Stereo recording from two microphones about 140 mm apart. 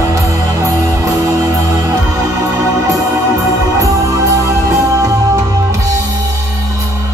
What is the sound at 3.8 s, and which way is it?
Music, 20° right (ahead or behind).